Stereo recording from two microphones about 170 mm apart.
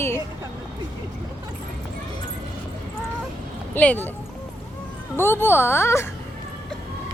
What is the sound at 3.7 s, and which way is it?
Speech, 10° left (ahead or behind).